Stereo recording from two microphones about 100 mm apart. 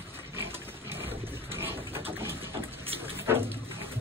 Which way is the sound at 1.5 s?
25° right (ahead or behind).